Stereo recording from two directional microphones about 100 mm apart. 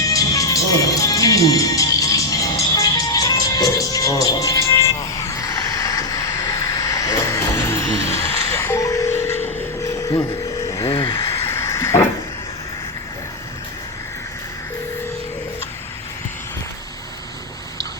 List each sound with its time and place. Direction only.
0.1 s music: 35° left (ahead or behind)
5.4 s vehicle: 35° left (ahead or behind)
8.5 s music: 25° left (ahead or behind)
11.3 s a sound: 25° left (ahead or behind)